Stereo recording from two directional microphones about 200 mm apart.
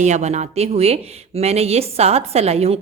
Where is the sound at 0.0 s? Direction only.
35° right (ahead or behind).